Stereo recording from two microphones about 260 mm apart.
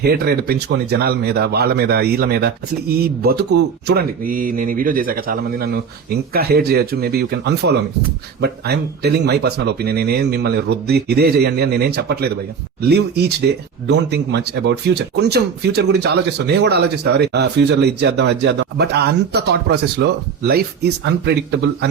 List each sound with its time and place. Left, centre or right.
0.0 s speech: right